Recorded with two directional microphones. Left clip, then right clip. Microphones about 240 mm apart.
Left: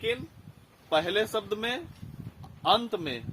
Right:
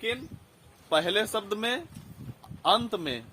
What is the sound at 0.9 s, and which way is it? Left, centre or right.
Speech, right.